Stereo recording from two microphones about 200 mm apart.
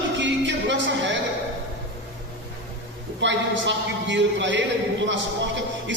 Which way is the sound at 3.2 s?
65° right (ahead or behind).